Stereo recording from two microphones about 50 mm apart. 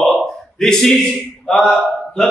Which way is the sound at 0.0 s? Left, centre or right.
Centre.